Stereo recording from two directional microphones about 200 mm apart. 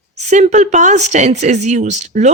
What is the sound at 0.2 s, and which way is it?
Speech, 35° right (ahead or behind).